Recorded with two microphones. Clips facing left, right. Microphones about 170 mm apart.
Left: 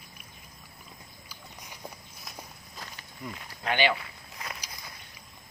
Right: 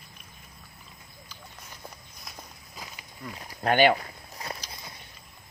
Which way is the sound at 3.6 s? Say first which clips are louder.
Right 6 dB; 45° right (ahead or behind).